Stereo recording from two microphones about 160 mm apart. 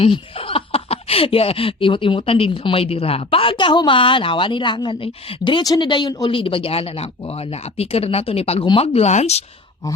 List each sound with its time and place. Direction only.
0.0 s speech: 35° left (ahead or behind)